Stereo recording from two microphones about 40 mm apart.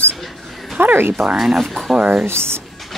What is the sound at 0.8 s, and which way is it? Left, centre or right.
Speech, right.